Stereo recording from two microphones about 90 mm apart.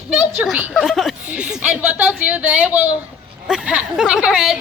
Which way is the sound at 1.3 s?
10° right (ahead or behind).